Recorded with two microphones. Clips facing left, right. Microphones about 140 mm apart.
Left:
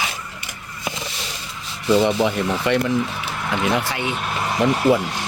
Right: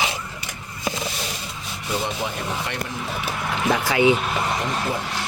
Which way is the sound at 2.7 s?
90° left.